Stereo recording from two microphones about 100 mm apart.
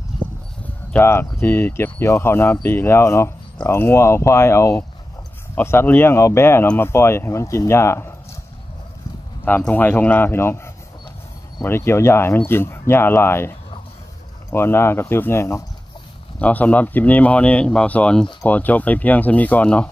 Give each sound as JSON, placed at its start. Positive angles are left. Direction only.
{"t": 0.9, "sound": "speech", "side_deg": 25}
{"t": 9.6, "sound": "speech", "side_deg": 15}
{"t": 16.3, "sound": "speech", "side_deg": 15}